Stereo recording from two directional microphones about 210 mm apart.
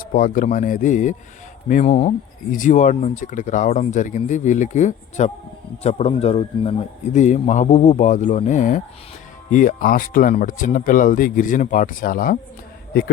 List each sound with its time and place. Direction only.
0.0 s speech: 40° left (ahead or behind)